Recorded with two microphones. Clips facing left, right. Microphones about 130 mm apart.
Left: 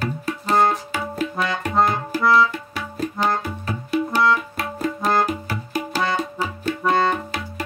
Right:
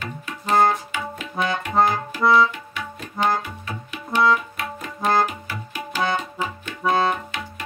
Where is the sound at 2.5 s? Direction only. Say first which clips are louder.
Left 3 dB; 35° left (ahead or behind).